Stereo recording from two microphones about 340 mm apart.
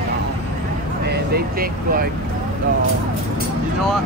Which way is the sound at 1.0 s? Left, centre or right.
Right.